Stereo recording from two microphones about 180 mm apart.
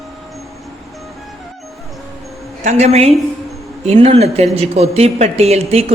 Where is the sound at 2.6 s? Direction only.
40° right (ahead or behind).